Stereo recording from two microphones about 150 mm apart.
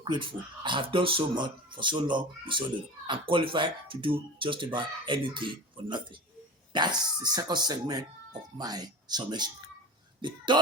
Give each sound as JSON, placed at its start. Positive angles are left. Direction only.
{"t": 0.0, "sound": "speech", "side_deg": -30}